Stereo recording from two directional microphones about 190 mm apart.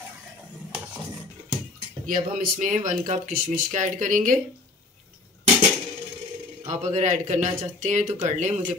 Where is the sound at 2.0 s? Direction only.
45° right (ahead or behind).